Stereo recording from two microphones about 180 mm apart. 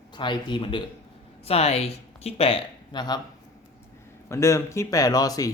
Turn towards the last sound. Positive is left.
turn(degrees=20)  # may be behind; listen again after turning